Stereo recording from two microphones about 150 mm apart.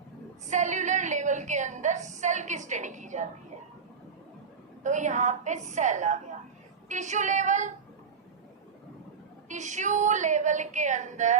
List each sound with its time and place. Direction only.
0.4 s a sound: 55° right (ahead or behind)
4.8 s a woman's voice: 55° right (ahead or behind)
9.5 s a woman's voice: 55° right (ahead or behind)